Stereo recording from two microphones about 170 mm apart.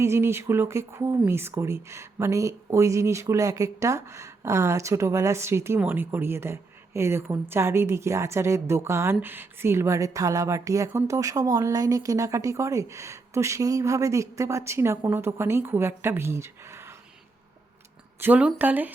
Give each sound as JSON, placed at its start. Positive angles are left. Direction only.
{"t": 0.0, "sound": "speech", "side_deg": -15}
{"t": 18.2, "sound": "speech", "side_deg": -10}